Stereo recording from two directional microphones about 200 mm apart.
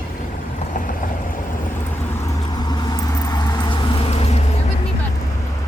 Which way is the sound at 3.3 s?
20° left (ahead or behind).